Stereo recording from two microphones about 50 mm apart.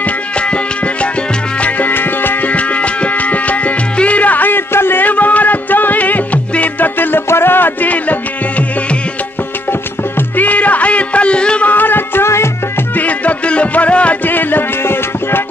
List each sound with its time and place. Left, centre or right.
0.0 s music: left
1.6 s music: left
2.5 s music: left
9.7 s music: left
11.6 s music: left
12.9 s music: left
14.3 s music: left